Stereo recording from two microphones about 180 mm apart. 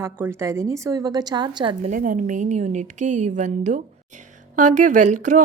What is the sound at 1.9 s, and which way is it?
Speech, 45° right (ahead or behind).